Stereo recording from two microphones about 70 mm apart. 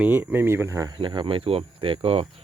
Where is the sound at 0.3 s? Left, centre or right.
Right.